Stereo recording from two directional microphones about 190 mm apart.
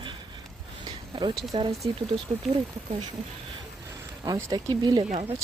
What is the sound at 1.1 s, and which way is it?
Speech, 25° right (ahead or behind).